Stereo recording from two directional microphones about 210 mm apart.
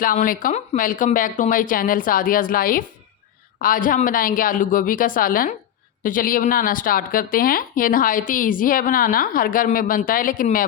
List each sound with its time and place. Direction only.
0.0 s speech: 40° left (ahead or behind)